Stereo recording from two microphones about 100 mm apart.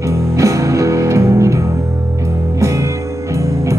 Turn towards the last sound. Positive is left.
turn(degrees=-30)  # may be behind; listen again after turning